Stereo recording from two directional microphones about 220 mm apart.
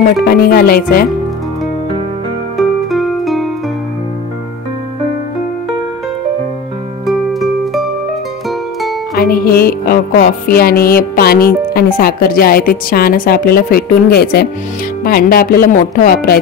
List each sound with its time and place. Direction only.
0.0 s music: 45° left (ahead or behind)
2.5 s music: centre (ahead or behind)
7.1 s music: centre (ahead or behind)
9.1 s music: 45° left (ahead or behind)